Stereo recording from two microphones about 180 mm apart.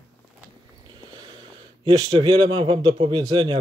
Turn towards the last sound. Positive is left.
turn(degrees=-25)  # may be behind; listen again after turning